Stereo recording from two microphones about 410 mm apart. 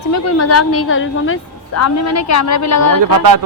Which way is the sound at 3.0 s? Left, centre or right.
Right.